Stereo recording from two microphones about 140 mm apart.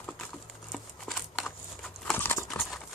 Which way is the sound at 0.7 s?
Centre (ahead or behind).